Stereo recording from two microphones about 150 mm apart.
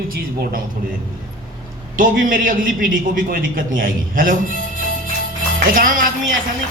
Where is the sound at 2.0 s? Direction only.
65° right (ahead or behind).